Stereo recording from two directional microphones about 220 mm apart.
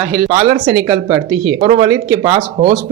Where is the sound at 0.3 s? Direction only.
25° right (ahead or behind).